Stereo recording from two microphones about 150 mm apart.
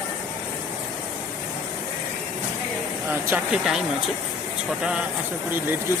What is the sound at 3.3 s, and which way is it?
Speech, 5° right (ahead or behind).